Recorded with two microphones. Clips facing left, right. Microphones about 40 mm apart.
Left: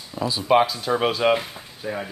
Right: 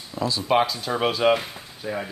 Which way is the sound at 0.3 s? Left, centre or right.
Centre.